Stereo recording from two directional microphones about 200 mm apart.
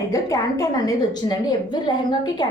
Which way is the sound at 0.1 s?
15° left (ahead or behind).